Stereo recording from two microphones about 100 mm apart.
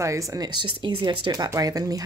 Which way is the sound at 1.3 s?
35° right (ahead or behind).